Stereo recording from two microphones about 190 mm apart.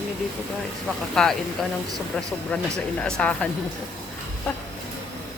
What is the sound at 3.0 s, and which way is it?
Speech, 5° left (ahead or behind).